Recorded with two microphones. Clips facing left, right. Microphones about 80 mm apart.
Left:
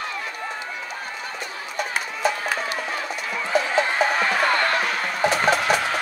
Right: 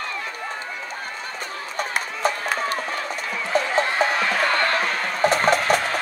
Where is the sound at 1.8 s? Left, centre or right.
Right.